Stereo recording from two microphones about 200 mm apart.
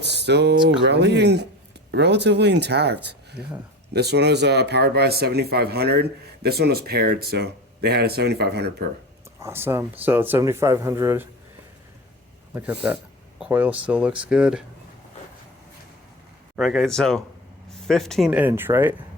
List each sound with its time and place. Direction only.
0.0 s speech: 60° right (ahead or behind)
3.4 s speech: centre (ahead or behind)
3.9 s speech: 55° right (ahead or behind)
9.4 s speech: 10° right (ahead or behind)
13.4 s speech: 10° right (ahead or behind)
16.6 s speech: centre (ahead or behind)